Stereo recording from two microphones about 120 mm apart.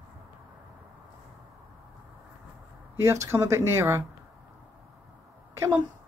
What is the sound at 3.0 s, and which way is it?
Speech, 20° right (ahead or behind).